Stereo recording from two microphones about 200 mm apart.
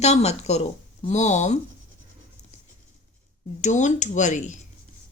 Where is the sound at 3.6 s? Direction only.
35° left (ahead or behind).